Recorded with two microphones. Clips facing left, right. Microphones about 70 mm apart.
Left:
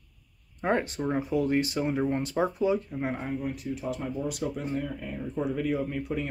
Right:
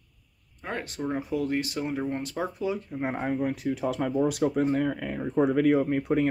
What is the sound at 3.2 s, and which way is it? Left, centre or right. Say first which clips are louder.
Speech: right 5 dB; right.